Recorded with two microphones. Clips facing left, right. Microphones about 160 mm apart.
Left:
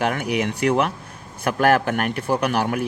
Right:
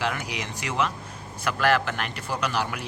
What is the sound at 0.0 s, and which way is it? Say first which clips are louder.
Speech: left 8 dB; 60° left (ahead or behind).